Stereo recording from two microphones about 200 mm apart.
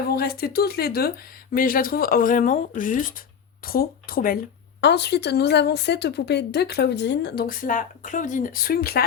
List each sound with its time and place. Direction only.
0.1 s speech: 50° left (ahead or behind)
4.8 s a woman's voice: 55° left (ahead or behind)